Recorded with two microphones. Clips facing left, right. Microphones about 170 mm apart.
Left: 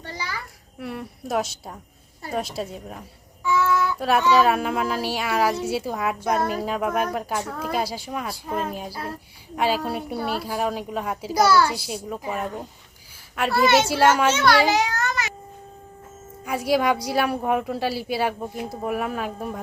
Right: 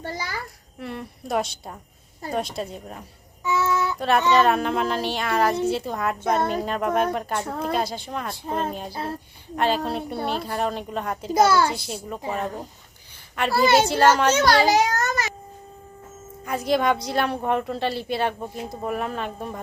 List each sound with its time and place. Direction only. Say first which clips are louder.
0.0 s a sound: right 2 dB; 45° right (ahead or behind)
0.8 s a woman's voice: left 1 dB; 5° left (ahead or behind)
3.4 s child singing: left 1 dB; 20° right (ahead or behind)
3.9 s a woman's voice: even; 5° left (ahead or behind)
9.6 s speech: even; 5° left (ahead or behind)
11.3 s a child's voice: even; 25° right (ahead or behind)
11.7 s a woman's voice: left 1 dB; 10° left (ahead or behind)
13.5 s a child's voice: even; 30° right (ahead or behind)
13.8 s a woman's voice: even; 5° left (ahead or behind)
14.3 s a child's voice: even; 40° right (ahead or behind)
14.7 s a sound: right 2 dB; 40° right (ahead or behind)
16.5 s a woman's voice: even; 10° left (ahead or behind)